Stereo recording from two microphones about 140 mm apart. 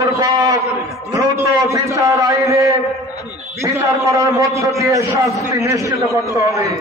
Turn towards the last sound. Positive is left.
turn(degrees=-20)  # may be behind; listen again after turning